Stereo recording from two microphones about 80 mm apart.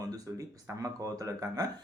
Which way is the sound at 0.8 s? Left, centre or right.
Right.